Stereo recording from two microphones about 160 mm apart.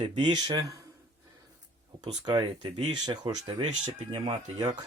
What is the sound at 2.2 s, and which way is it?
Speech, 25° right (ahead or behind).